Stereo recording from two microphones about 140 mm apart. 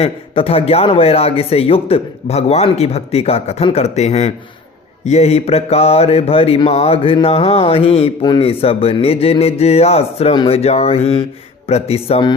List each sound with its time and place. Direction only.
0.0 s speech: 45° left (ahead or behind)